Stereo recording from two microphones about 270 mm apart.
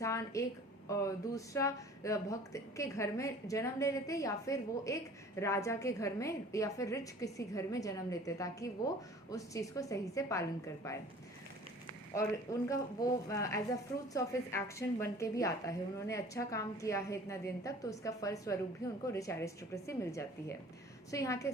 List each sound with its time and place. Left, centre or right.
0.0 s music: centre
0.9 s a woman's voice: centre
12.1 s a woman's voice: centre